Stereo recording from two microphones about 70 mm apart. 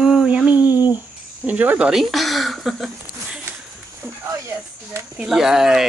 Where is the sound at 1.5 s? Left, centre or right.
Right.